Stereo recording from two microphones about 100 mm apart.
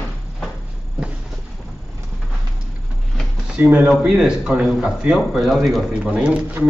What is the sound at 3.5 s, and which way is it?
A man's voice, 10° right (ahead or behind).